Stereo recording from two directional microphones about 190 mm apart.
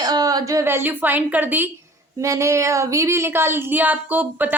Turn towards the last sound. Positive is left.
turn(degrees=-10)  # may be behind; listen again after turning